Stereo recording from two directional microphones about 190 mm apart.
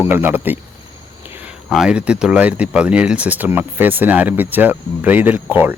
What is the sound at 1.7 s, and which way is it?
Speech, 5° right (ahead or behind).